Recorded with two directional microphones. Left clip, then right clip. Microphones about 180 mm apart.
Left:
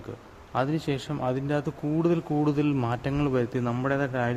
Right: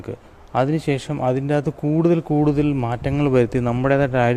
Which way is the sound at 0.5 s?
30° right (ahead or behind).